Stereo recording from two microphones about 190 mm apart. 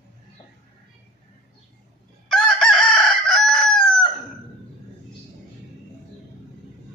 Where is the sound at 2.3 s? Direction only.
Centre (ahead or behind).